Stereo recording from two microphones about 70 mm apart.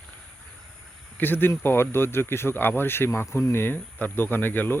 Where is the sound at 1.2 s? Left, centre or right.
Left.